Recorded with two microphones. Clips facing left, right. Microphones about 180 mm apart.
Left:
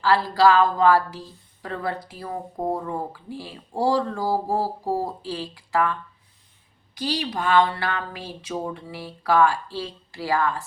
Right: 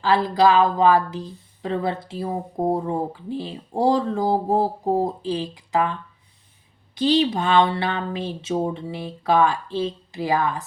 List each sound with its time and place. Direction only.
0.0 s a woman's voice: 20° right (ahead or behind)